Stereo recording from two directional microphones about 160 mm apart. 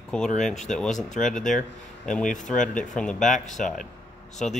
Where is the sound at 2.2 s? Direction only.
50° left (ahead or behind).